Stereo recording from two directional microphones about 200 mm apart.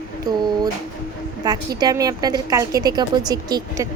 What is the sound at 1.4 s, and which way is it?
A woman's voice, 20° right (ahead or behind).